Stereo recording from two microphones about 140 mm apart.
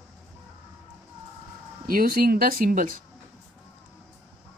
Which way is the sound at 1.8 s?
90° right.